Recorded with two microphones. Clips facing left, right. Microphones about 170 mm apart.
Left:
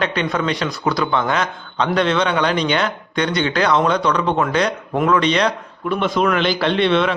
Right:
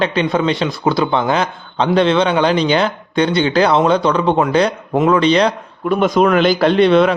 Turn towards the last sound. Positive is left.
turn(degrees=-40)  # may be behind; listen again after turning